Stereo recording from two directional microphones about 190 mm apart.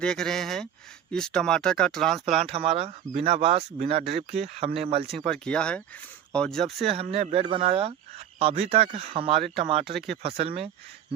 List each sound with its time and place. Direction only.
0.0 s speech: 5° left (ahead or behind)
2.4 s speech: 35° right (ahead or behind)
5.0 s speech: centre (ahead or behind)
6.9 s speech: 30° right (ahead or behind)